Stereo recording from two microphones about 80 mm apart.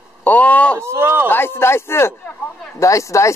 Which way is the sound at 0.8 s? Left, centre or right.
Right.